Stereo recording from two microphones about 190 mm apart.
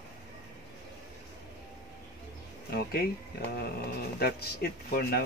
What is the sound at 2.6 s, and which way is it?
Speech, 55° left (ahead or behind).